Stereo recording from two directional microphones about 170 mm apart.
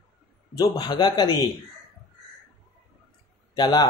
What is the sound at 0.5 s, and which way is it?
Speech, 20° left (ahead or behind).